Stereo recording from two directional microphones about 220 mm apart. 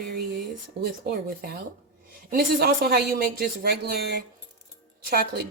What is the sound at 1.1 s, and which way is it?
Speech, 45° right (ahead or behind).